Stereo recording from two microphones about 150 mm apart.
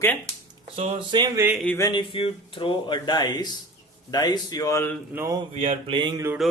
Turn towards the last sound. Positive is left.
turn(degrees=0)  # may be behind; listen again after turning